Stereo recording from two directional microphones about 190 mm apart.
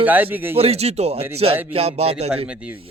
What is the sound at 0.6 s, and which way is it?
Speech, 30° right (ahead or behind).